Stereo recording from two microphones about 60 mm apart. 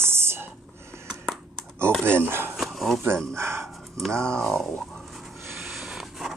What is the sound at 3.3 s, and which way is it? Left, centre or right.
Speech, right.